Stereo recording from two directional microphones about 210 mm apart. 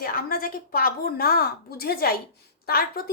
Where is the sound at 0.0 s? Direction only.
45° left (ahead or behind).